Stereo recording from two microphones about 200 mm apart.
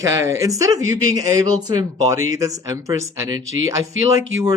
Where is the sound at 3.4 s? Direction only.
75° right (ahead or behind).